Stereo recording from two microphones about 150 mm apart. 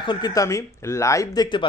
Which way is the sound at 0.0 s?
30° left (ahead or behind).